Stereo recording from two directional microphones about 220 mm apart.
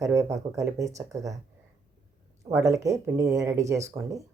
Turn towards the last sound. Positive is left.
turn(degrees=-15)  # may be behind; listen again after turning